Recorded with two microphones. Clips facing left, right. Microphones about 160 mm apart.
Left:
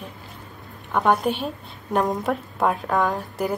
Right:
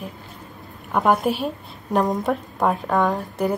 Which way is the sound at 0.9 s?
5° right (ahead or behind).